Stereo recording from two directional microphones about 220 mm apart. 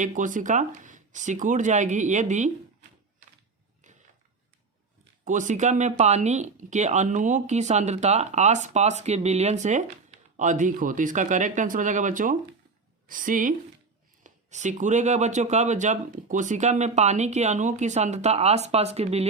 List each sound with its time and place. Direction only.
0.0 s speech: 35° right (ahead or behind)
5.2 s speech: 35° right (ahead or behind)